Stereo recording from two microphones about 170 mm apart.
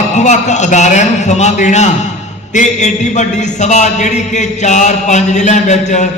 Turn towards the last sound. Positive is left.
turn(degrees=45)  # may be behind; listen again after turning